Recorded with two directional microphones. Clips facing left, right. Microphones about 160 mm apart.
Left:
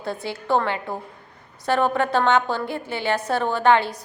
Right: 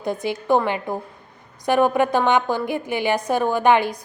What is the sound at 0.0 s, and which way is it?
A woman's voice, 15° right (ahead or behind).